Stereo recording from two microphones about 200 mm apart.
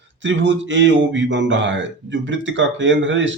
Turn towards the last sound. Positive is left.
turn(degrees=-65)  # may be behind; listen again after turning